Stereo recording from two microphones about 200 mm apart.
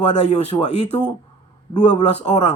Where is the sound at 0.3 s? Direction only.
35° left (ahead or behind).